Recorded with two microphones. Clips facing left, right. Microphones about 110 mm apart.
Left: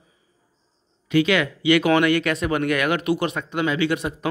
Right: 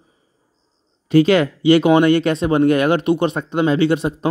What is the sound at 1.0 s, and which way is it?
Speech, 35° right (ahead or behind).